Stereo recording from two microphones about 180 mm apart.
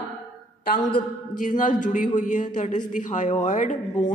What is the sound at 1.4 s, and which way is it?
A woman's voice, 45° left (ahead or behind).